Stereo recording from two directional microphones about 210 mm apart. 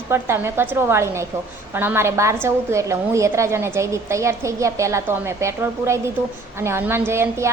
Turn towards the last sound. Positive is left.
turn(degrees=-10)  # may be behind; listen again after turning